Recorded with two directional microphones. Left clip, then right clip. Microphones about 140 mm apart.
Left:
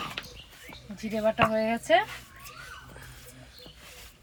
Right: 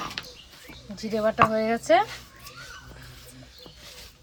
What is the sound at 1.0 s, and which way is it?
Speech, 10° right (ahead or behind).